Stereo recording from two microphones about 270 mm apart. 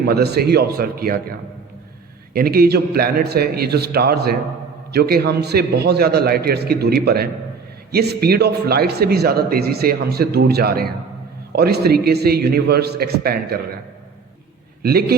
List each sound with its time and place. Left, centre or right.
0.0 s speech: right
2.3 s speech: right
14.8 s a man's voice: right